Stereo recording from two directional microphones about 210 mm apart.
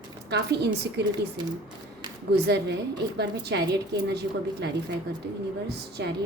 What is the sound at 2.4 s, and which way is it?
A woman's voice, 50° right (ahead or behind).